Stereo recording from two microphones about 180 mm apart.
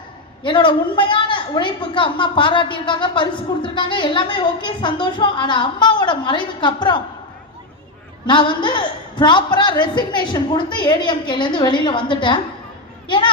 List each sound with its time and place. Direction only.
0.4 s a woman's voice: 25° left (ahead or behind)
8.3 s a woman's voice: 25° left (ahead or behind)
13.1 s a sound: 25° left (ahead or behind)